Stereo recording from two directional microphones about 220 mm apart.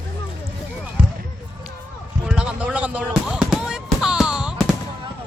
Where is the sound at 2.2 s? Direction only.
5° right (ahead or behind).